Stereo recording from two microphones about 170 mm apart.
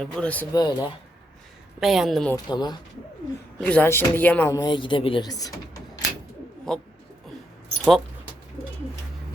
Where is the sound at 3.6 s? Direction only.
10° left (ahead or behind).